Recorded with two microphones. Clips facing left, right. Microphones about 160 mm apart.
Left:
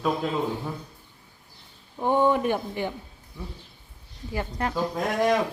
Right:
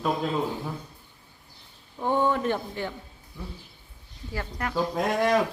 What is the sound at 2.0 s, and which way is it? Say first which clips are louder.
Speech: left 3 dB; 15° left (ahead or behind).